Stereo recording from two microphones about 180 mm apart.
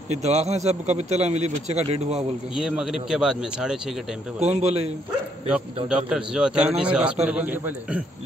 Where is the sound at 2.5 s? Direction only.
5° right (ahead or behind).